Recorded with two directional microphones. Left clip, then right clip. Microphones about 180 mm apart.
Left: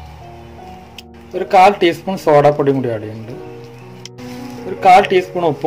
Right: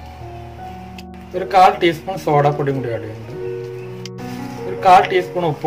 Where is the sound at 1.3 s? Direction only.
45° left (ahead or behind).